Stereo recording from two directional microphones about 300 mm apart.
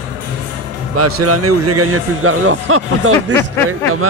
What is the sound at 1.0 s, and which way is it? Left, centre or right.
Speech, right.